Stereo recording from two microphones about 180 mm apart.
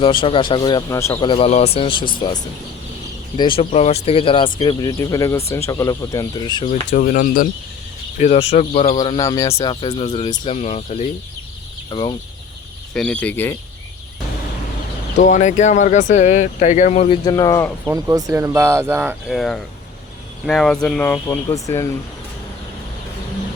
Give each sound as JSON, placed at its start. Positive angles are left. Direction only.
{"t": 0.0, "sound": "speech", "side_deg": 25}
{"t": 1.1, "sound": "speech", "side_deg": 30}
{"t": 6.7, "sound": "speech", "side_deg": 45}
{"t": 8.2, "sound": "speech", "side_deg": 35}
{"t": 9.0, "sound": "speech", "side_deg": 25}
{"t": 9.5, "sound": "speech", "side_deg": 30}
{"t": 10.5, "sound": "speech", "side_deg": 35}
{"t": 11.9, "sound": "speech", "side_deg": 25}
{"t": 12.9, "sound": "speech", "side_deg": 5}
{"t": 15.2, "sound": "speech", "side_deg": 45}
{"t": 17.2, "sound": "speech", "side_deg": 20}
{"t": 17.8, "sound": "speech", "side_deg": -20}
{"t": 19.3, "sound": "speech", "side_deg": 5}